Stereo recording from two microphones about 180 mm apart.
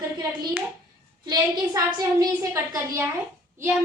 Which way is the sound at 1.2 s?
20° right (ahead or behind).